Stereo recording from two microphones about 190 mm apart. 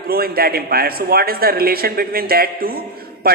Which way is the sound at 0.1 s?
50° right (ahead or behind).